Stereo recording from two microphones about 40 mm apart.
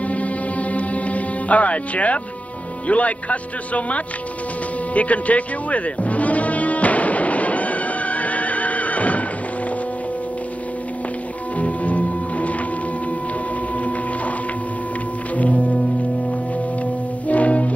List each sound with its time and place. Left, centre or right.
0.1 s music: left
2.9 s a man's voice: left
4.9 s music: left
11.5 s music: left
15.3 s music: left
17.3 s music: left